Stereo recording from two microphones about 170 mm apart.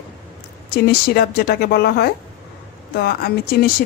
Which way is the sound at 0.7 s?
65° left (ahead or behind).